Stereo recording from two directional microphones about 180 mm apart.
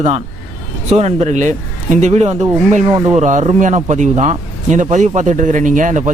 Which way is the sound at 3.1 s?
40° right (ahead or behind).